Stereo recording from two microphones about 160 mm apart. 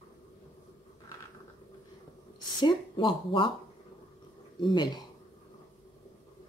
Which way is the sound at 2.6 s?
30° left (ahead or behind).